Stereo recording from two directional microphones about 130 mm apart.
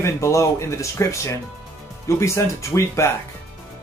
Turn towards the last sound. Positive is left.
turn(degrees=20)  # may be behind; listen again after turning